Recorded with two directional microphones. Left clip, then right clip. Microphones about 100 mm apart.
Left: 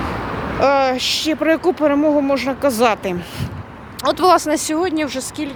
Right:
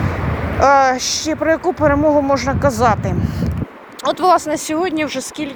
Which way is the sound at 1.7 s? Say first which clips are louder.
Right 2 dB; 45° left (ahead or behind).